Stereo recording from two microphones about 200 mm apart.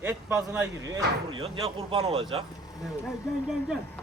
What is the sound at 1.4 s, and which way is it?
Speech, 25° right (ahead or behind).